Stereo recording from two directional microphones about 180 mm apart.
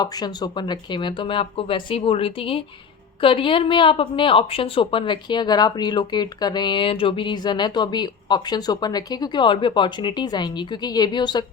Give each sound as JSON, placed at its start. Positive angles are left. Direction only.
{"t": 0.0, "sound": "a woman's voice", "side_deg": 20}